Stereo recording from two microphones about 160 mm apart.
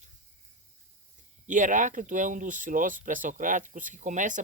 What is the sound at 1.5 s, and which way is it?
Speech, 50° right (ahead or behind).